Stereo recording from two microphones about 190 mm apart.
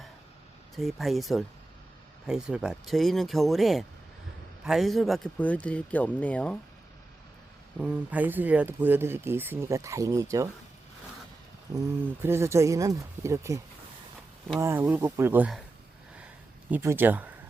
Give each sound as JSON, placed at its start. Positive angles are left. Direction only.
{"t": 0.8, "sound": "speech", "side_deg": 0}
{"t": 7.8, "sound": "speech", "side_deg": -10}
{"t": 11.7, "sound": "speech", "side_deg": -20}
{"t": 14.6, "sound": "speech", "side_deg": -10}
{"t": 16.6, "sound": "speech", "side_deg": -10}